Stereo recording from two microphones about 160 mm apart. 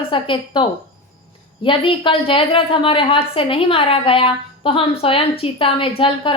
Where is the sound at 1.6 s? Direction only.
35° left (ahead or behind).